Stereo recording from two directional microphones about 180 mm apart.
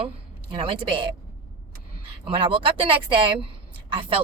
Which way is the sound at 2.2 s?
30° right (ahead or behind).